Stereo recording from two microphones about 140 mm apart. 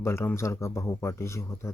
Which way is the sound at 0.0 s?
20° left (ahead or behind).